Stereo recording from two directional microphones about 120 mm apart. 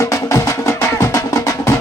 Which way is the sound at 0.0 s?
25° left (ahead or behind).